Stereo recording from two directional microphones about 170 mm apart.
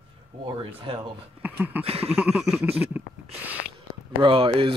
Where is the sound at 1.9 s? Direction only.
35° right (ahead or behind).